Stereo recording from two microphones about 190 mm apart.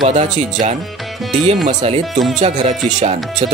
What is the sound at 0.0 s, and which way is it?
Speech, 40° right (ahead or behind).